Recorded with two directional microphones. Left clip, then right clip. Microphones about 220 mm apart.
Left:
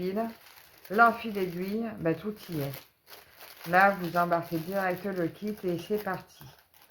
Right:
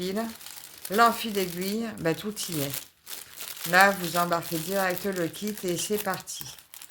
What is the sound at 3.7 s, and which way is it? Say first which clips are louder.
Speech: right 2 dB; 40° right (ahead or behind).